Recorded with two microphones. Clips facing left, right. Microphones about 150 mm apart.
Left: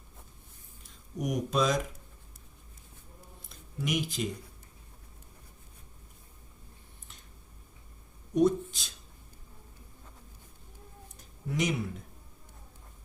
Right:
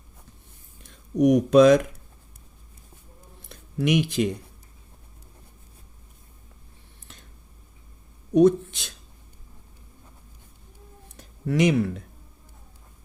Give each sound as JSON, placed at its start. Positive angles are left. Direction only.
{"t": 0.8, "sound": "speech", "side_deg": -70}
{"t": 3.5, "sound": "speech", "side_deg": -75}
{"t": 8.3, "sound": "speech", "side_deg": -70}
{"t": 11.2, "sound": "a sound", "side_deg": -85}